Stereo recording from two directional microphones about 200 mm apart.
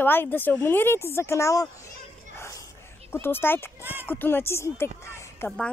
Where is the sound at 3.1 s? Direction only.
10° left (ahead or behind).